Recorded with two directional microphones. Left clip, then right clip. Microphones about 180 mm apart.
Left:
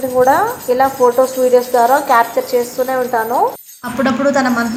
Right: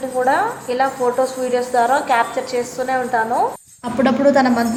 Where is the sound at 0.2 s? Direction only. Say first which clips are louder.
Left 5 dB; 15° left (ahead or behind).